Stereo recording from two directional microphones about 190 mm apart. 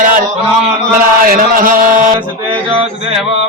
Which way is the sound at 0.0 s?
45° right (ahead or behind).